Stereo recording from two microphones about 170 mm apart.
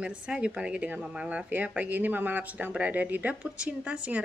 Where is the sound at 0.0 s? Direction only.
5° right (ahead or behind).